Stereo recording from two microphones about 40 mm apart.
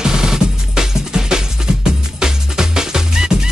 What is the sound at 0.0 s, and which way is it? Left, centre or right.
Music, centre.